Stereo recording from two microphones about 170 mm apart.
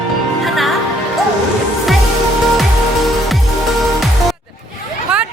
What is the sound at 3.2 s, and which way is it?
Music, centre (ahead or behind).